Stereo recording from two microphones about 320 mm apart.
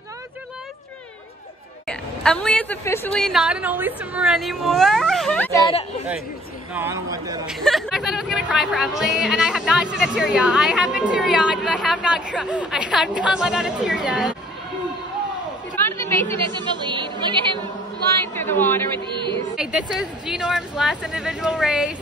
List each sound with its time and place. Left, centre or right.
1.9 s a woman's voice: centre
5.7 s speech: centre
6.7 s speech: centre
7.6 s a woman's voice: centre
16.0 s chatter: centre
16.5 s speech: centre
18.2 s a woman's voice: centre
19.0 s a woman's voice: centre
19.5 s a woman's voice: centre